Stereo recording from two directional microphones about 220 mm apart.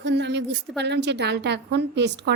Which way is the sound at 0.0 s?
50° right (ahead or behind).